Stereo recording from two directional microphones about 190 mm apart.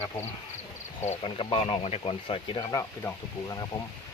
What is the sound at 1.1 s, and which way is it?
Speech, 30° left (ahead or behind).